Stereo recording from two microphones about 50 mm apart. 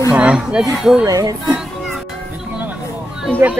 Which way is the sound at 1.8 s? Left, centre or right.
Centre.